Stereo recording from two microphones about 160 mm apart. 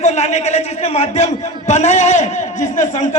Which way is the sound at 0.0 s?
45° left (ahead or behind).